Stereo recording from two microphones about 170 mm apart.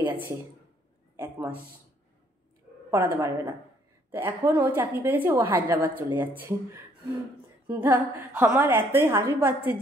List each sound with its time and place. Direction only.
0.0 s a sound: 10° right (ahead or behind)
1.1 s a woman's voice: 10° right (ahead or behind)
2.9 s a woman's voice: 15° right (ahead or behind)